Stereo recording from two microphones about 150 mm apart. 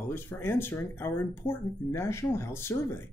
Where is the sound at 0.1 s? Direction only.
15° left (ahead or behind).